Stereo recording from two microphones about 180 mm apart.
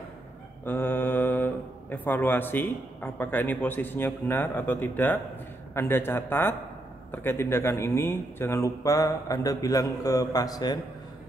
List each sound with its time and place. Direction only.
0.7 s speech: 10° left (ahead or behind)